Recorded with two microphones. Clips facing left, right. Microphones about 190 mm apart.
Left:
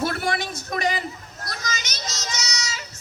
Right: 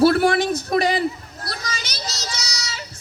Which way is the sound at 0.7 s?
35° right (ahead or behind).